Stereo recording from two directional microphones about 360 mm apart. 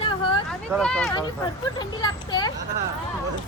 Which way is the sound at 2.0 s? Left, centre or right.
Centre.